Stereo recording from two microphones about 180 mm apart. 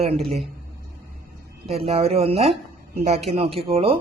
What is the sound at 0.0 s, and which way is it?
Speech, 35° right (ahead or behind).